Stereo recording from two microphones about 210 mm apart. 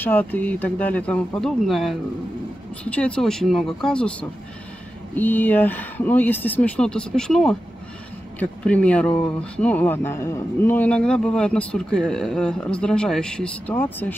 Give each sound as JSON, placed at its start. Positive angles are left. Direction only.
{"t": 0.0, "sound": "speech", "side_deg": 10}